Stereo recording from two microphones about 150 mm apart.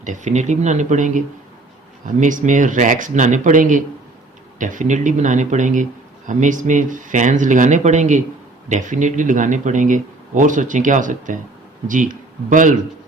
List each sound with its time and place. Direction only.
0.0 s speech: 55° right (ahead or behind)